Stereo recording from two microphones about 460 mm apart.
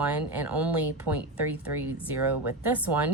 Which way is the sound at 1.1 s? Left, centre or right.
Right.